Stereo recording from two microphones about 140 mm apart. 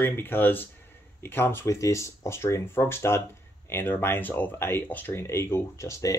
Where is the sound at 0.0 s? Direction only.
15° left (ahead or behind).